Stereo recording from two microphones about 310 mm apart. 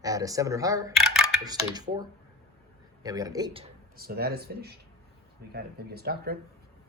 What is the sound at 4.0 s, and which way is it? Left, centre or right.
Speech, right.